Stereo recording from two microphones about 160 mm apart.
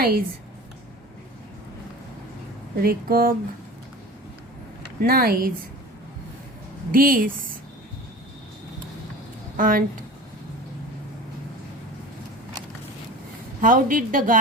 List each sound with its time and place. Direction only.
0.0 s a woman's voice: 65° right (ahead or behind)
2.8 s a woman's voice: 65° right (ahead or behind)
4.9 s speech: 65° right (ahead or behind)
6.9 s a woman's voice: 65° right (ahead or behind)
9.6 s speech: 60° right (ahead or behind)
13.6 s a woman's voice: 60° right (ahead or behind)